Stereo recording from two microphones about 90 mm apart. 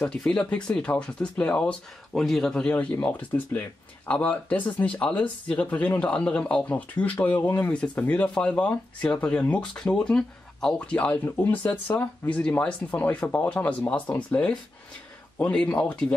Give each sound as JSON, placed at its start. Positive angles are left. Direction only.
{"t": 0.0, "sound": "speech", "side_deg": 10}